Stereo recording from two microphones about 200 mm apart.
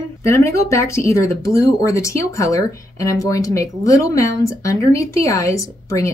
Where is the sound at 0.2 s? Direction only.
15° left (ahead or behind).